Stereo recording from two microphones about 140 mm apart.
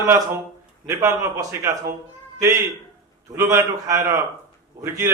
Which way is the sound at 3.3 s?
25° right (ahead or behind).